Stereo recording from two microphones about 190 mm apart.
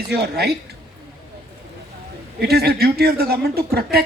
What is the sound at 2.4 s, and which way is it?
A woman's voice, 55° right (ahead or behind).